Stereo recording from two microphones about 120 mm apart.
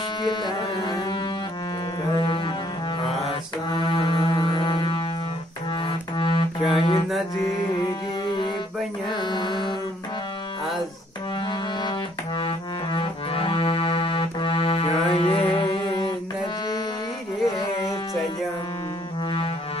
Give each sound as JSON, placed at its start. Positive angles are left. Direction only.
{"t": 0.2, "sound": "music", "side_deg": 40}
{"t": 2.1, "sound": "music", "side_deg": 45}
{"t": 9.1, "sound": "mantra", "side_deg": 40}
{"t": 12.4, "sound": "accordion", "side_deg": 45}
{"t": 17.6, "sound": "music", "side_deg": 45}